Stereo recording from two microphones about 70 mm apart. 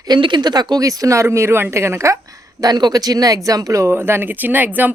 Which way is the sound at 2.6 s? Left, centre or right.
Right.